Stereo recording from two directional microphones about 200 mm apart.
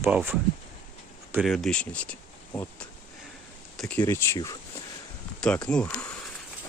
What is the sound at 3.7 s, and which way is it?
Speech, 5° left (ahead or behind).